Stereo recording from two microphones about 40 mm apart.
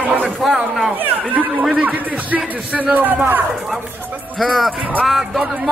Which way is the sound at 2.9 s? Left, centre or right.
Right.